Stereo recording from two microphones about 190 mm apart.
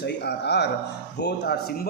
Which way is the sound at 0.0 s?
60° left (ahead or behind).